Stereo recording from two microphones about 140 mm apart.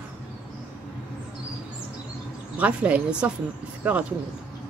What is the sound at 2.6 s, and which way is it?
A woman's voice, 10° right (ahead or behind).